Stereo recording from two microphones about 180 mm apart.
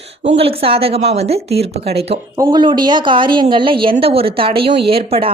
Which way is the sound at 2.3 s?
20° right (ahead or behind).